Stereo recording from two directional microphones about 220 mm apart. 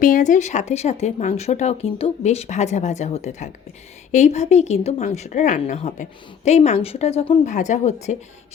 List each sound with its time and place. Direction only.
0.0 s a woman's voice: 35° left (ahead or behind)